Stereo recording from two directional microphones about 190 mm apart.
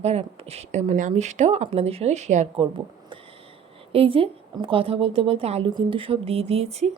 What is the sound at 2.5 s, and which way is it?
Speech, 25° right (ahead or behind).